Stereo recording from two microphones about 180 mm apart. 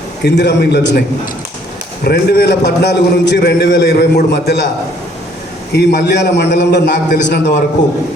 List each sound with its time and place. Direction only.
0.2 s a man's voice: 70° left (ahead or behind)
2.0 s a man's voice: 65° left (ahead or behind)
5.7 s a man's voice: 65° left (ahead or behind)